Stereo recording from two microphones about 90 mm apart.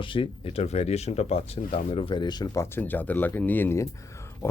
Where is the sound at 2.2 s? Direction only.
50° left (ahead or behind).